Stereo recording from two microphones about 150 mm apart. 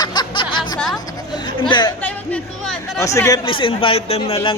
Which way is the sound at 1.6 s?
30° left (ahead or behind).